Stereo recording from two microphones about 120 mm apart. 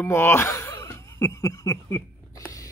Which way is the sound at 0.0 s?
20° left (ahead or behind).